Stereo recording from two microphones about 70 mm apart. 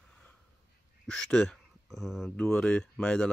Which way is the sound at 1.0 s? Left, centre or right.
Centre.